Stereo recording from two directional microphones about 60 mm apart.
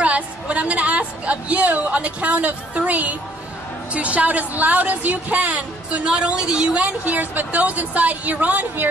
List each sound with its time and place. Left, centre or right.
0.0 s a woman's voice: right